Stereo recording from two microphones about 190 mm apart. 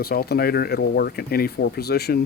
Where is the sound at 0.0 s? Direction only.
55° left (ahead or behind).